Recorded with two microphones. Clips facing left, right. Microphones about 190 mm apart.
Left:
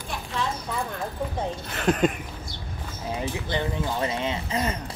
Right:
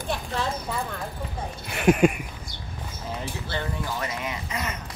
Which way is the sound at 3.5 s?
25° left (ahead or behind).